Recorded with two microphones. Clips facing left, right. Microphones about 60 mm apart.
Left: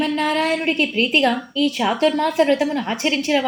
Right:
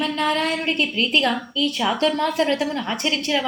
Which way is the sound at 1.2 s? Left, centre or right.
Centre.